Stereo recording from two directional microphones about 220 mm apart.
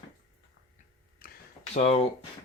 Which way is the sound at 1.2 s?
40° left (ahead or behind).